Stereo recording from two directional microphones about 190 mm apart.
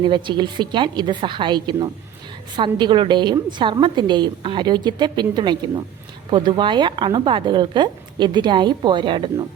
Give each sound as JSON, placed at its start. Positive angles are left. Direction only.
{"t": 0.0, "sound": "a woman's voice", "side_deg": -25}